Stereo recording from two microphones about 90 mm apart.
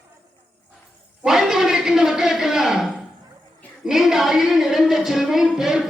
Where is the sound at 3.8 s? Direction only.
5° right (ahead or behind).